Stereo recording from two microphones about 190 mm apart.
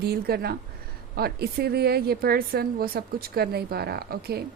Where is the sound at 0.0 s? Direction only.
55° right (ahead or behind).